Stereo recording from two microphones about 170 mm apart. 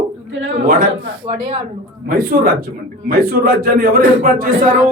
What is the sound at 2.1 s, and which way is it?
A man's voice, 60° right (ahead or behind).